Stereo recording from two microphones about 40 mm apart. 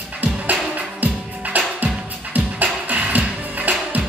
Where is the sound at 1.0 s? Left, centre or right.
Right.